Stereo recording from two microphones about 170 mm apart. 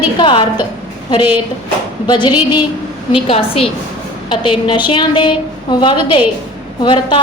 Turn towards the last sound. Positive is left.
turn(degrees=30)  # may be behind; listen again after turning